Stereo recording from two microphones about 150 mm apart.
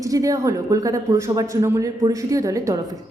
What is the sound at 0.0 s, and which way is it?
A woman's voice, 20° right (ahead or behind).